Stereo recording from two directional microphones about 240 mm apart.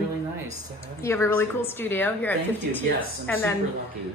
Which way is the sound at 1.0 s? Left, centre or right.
Centre.